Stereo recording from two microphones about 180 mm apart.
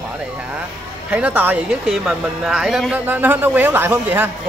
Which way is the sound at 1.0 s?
10° right (ahead or behind).